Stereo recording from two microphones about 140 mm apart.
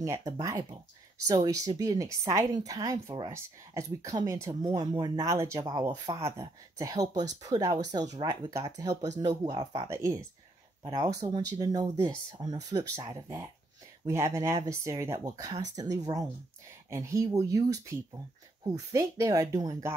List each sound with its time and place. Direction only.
0.0 s speech: 25° right (ahead or behind)